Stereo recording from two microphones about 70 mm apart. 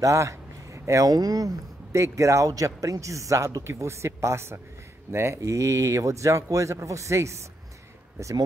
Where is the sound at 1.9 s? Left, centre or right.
Right.